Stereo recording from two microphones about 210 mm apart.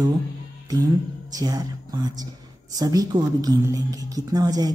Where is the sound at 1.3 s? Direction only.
20° right (ahead or behind).